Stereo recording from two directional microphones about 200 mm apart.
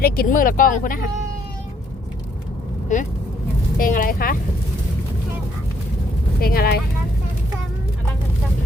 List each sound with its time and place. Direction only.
0.0 s speech: 45° left (ahead or behind)
2.9 s speech: 40° left (ahead or behind)
6.4 s speech: 50° left (ahead or behind)